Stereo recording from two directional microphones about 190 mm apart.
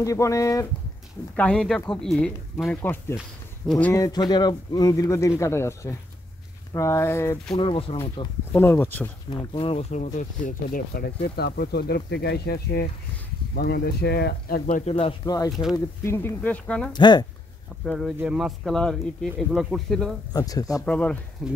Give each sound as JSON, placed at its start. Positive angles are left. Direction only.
{"t": 0.0, "sound": "speech", "side_deg": 15}
{"t": 1.3, "sound": "speech", "side_deg": 5}
{"t": 7.5, "sound": "speech", "side_deg": 30}
{"t": 8.5, "sound": "speech", "side_deg": 10}
{"t": 9.3, "sound": "speech", "side_deg": 25}
{"t": 14.9, "sound": "speech", "side_deg": 30}
{"t": 16.9, "sound": "speech", "side_deg": 25}
{"t": 17.8, "sound": "speech", "side_deg": 0}
{"t": 20.3, "sound": "speech", "side_deg": 20}
{"t": 20.8, "sound": "speech", "side_deg": 5}